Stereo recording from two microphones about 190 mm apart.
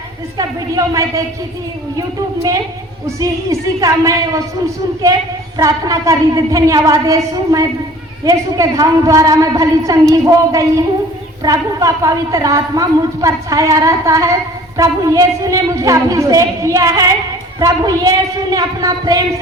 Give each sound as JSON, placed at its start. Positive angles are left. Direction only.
{"t": 0.3, "sound": "a woman's voice", "side_deg": -15}
{"t": 3.2, "sound": "a woman's voice", "side_deg": -15}
{"t": 5.5, "sound": "a woman's voice", "side_deg": -20}